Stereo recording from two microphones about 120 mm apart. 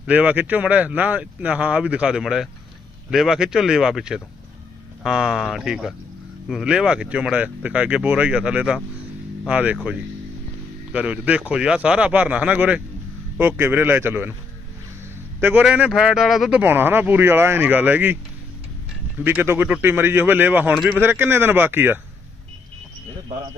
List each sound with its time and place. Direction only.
0.1 s speech: 15° right (ahead or behind)
10.9 s speech: 10° right (ahead or behind)
15.4 s a man's voice: 15° right (ahead or behind)
16.6 s speech: 15° right (ahead or behind)
19.2 s speech: 20° right (ahead or behind)